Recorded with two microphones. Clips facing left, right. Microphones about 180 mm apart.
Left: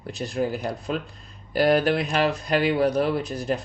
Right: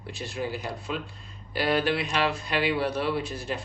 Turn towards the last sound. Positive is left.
turn(degrees=40)  # may be behind; listen again after turning